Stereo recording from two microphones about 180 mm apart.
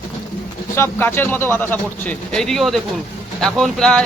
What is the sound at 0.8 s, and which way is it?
Speech, 10° left (ahead or behind).